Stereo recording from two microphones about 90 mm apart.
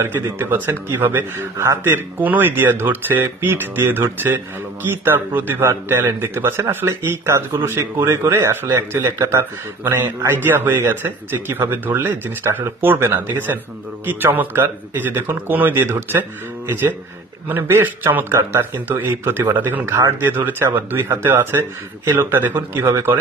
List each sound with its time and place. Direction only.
0.0 s a man's voice: 25° right (ahead or behind)